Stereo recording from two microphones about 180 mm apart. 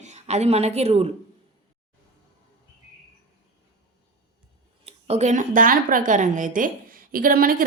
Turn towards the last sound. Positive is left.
turn(degrees=-50)  # may be behind; listen again after turning